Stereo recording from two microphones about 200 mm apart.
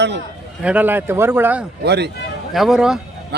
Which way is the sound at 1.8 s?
55° right (ahead or behind).